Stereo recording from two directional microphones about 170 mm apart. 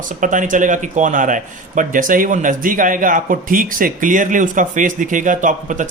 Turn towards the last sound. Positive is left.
turn(degrees=-50)  # may be behind; listen again after turning